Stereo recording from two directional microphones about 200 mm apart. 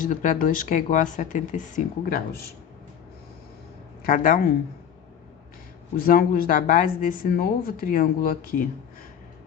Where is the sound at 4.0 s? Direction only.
45° left (ahead or behind).